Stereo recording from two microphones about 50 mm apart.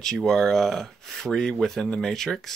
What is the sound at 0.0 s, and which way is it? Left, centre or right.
Speech, centre.